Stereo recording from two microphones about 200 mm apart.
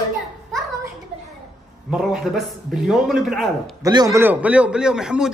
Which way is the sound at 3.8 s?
20° right (ahead or behind).